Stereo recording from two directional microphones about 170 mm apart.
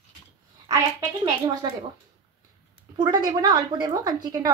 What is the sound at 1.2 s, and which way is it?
Speech, 25° right (ahead or behind).